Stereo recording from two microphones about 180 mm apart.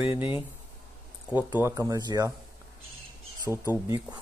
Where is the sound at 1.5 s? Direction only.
15° right (ahead or behind).